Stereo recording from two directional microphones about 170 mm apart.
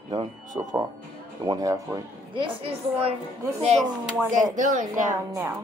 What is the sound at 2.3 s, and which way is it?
Speech, 30° right (ahead or behind).